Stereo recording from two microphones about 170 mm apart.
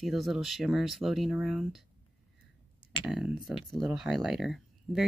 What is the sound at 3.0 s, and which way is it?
Speech, 5° right (ahead or behind).